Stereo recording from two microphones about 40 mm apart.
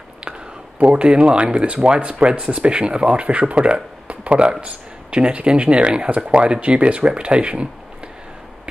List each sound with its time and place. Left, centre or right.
0.8 s speech: right